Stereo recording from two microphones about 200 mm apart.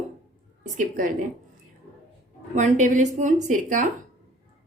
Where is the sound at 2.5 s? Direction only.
35° right (ahead or behind).